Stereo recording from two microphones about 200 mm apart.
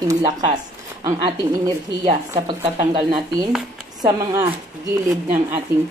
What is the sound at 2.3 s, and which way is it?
Speech, 30° right (ahead or behind).